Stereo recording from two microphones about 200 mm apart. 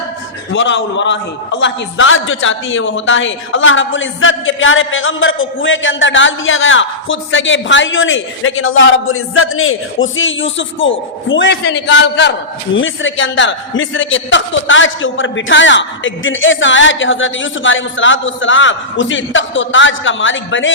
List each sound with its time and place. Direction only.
0.5 s a man's voice: 65° left (ahead or behind)
12.7 s a man's voice: 70° left (ahead or behind)